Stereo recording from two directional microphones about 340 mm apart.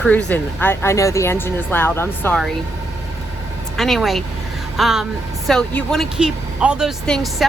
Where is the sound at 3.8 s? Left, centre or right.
Centre.